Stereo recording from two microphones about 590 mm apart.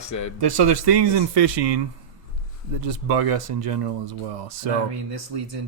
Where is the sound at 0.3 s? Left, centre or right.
Right.